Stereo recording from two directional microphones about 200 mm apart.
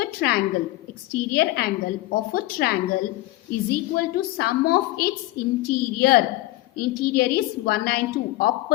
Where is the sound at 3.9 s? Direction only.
50° left (ahead or behind).